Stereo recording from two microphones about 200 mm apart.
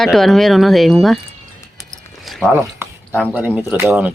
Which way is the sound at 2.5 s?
10° right (ahead or behind).